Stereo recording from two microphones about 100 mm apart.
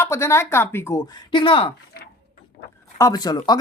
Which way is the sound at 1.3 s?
55° left (ahead or behind).